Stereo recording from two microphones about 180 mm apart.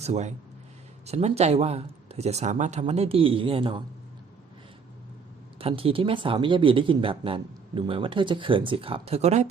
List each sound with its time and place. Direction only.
0.0 s speech: 40° right (ahead or behind)
5.5 s speech: 30° right (ahead or behind)